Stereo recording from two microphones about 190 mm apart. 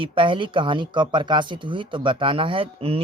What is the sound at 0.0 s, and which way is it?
Speech, 25° right (ahead or behind).